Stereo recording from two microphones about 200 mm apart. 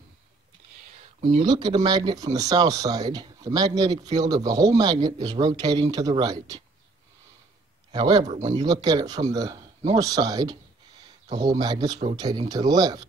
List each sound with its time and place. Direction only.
1.4 s speech: 20° right (ahead or behind)
7.9 s speech: 20° right (ahead or behind)